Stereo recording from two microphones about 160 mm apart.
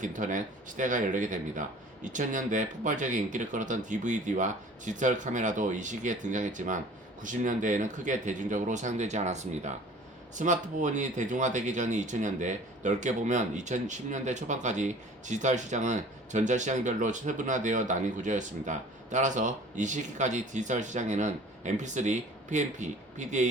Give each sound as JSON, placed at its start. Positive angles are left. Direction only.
{"t": 0.0, "sound": "speech", "side_deg": -55}